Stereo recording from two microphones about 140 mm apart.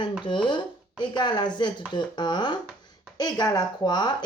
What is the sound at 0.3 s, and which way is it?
A woman's voice, 35° left (ahead or behind).